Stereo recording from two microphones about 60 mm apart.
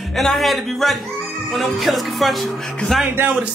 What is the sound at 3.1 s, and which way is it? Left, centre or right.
Speech, right.